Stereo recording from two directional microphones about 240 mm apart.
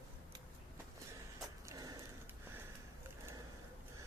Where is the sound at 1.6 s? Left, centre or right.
Centre.